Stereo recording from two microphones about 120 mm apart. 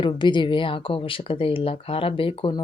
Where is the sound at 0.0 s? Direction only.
40° left (ahead or behind).